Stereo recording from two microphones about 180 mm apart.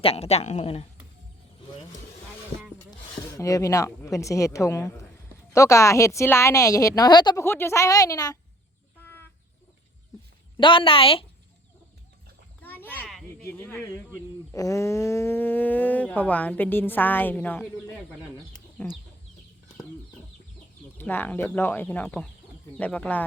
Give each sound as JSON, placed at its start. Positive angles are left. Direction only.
{"t": 0.0, "sound": "a woman's voice", "side_deg": 35}
{"t": 3.2, "sound": "speech", "side_deg": 15}
{"t": 7.4, "sound": "a woman's voice", "side_deg": 15}
{"t": 10.6, "sound": "a woman's voice", "side_deg": 30}
{"t": 12.6, "sound": "a sound", "side_deg": 10}
{"t": 13.4, "sound": "speech", "side_deg": 10}
{"t": 18.8, "sound": "chicken", "side_deg": 5}
{"t": 21.0, "sound": "speech", "side_deg": 10}